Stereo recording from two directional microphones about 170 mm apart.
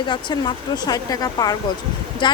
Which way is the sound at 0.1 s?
25° left (ahead or behind).